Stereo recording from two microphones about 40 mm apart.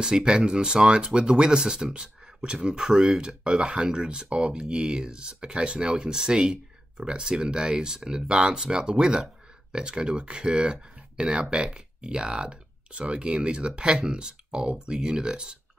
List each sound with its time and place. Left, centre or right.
0.0 s speech: centre